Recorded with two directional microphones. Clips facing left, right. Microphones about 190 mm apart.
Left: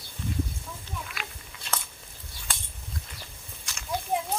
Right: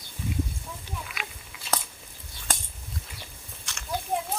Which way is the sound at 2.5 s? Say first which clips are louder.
Right 5 dB; 45° right (ahead or behind).